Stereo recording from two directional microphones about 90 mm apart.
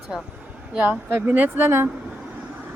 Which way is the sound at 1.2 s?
20° right (ahead or behind).